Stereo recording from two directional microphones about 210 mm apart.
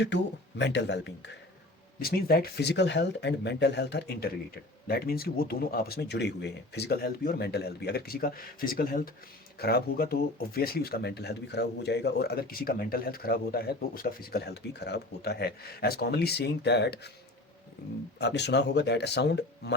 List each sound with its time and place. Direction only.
0.1 s speech: 55° left (ahead or behind)
18.2 s speech: 55° left (ahead or behind)